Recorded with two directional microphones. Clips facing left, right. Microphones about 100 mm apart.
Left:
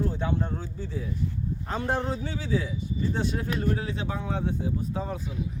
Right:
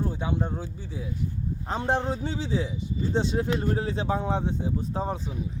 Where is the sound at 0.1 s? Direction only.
15° right (ahead or behind).